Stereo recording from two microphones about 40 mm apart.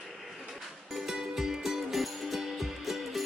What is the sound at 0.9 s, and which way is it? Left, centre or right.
Music, centre.